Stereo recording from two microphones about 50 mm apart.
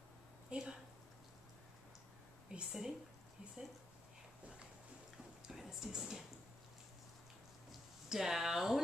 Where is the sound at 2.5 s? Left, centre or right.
Centre.